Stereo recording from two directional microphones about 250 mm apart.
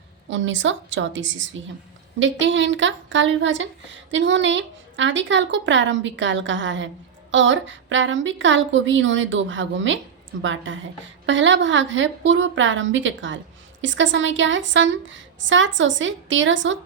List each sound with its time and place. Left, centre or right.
0.3 s speech: right